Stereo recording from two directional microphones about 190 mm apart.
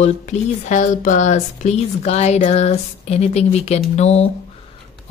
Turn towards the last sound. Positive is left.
turn(degrees=35)  # may be behind; listen again after turning